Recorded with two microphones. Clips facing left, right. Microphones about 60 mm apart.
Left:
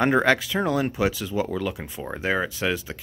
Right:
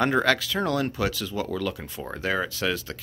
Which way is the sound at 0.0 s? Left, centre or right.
Centre.